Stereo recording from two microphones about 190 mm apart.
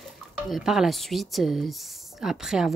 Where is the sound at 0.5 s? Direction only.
Centre (ahead or behind).